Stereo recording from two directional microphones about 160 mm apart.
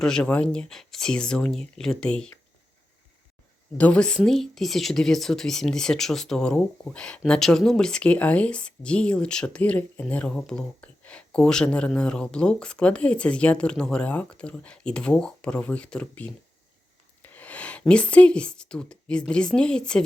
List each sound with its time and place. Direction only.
0.0 s speech: 5° left (ahead or behind)
3.8 s speech: 5° left (ahead or behind)